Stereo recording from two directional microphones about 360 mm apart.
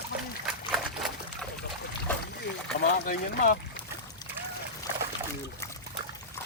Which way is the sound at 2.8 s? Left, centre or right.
Left.